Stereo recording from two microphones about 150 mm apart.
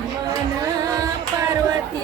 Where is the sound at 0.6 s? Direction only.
25° right (ahead or behind).